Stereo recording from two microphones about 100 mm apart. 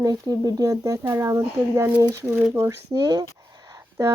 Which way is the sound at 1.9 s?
15° right (ahead or behind).